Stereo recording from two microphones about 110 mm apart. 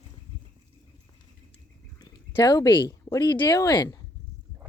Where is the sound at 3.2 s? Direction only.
45° left (ahead or behind).